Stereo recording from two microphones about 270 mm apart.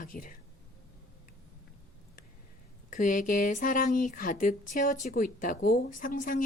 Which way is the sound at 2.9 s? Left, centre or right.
Left.